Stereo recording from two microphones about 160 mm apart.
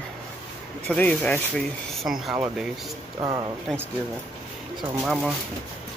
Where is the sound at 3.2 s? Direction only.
25° right (ahead or behind).